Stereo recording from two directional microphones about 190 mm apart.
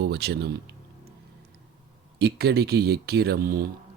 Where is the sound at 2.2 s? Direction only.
55° right (ahead or behind).